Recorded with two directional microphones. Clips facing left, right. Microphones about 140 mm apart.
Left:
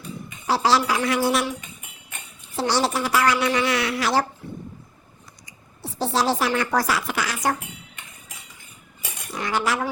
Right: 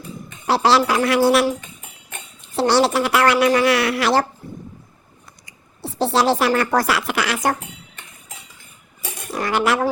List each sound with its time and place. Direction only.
0.4 s speech: 65° right (ahead or behind)
2.6 s speech: 70° right (ahead or behind)
5.5 s a sound: 65° right (ahead or behind)
6.6 s speech: 55° right (ahead or behind); by 7.5 s 75° right (ahead or behind)
9.3 s speech: 60° right (ahead or behind)